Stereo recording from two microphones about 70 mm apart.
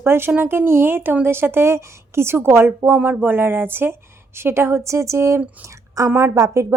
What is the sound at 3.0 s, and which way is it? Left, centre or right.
A woman's voice, right.